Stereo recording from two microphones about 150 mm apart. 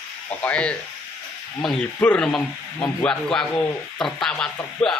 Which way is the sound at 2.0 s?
10° left (ahead or behind).